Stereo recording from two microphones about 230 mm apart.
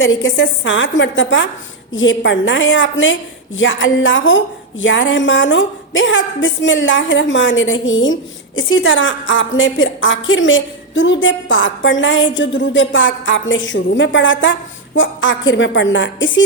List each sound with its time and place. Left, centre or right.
0.0 s a woman's voice: left